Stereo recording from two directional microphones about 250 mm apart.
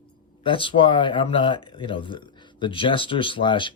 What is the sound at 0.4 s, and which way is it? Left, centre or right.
Speech, centre.